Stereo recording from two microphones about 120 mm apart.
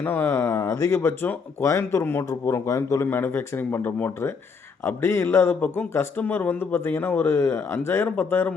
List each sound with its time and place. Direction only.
0.0 s speech: 20° left (ahead or behind)